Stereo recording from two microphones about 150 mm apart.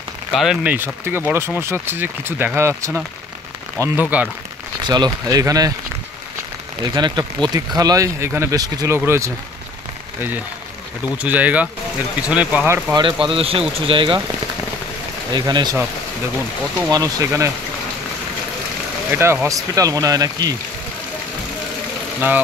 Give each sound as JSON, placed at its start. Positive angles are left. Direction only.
{"t": 0.3, "sound": "speech", "side_deg": 0}
{"t": 0.7, "sound": "speech", "side_deg": -15}
{"t": 4.8, "sound": "speech", "side_deg": -30}
{"t": 6.8, "sound": "speech", "side_deg": -30}
{"t": 11.2, "sound": "speech", "side_deg": -10}
{"t": 12.9, "sound": "speech", "side_deg": -35}
{"t": 15.3, "sound": "speech", "side_deg": -30}
{"t": 16.9, "sound": "speech", "side_deg": -20}
{"t": 19.0, "sound": "speech", "side_deg": -15}